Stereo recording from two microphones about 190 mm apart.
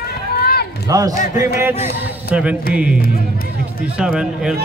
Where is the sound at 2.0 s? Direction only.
5° right (ahead or behind).